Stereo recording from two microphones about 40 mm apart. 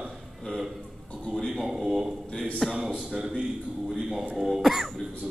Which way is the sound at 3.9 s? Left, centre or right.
Centre.